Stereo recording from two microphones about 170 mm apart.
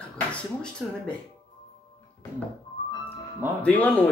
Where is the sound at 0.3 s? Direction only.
5° left (ahead or behind).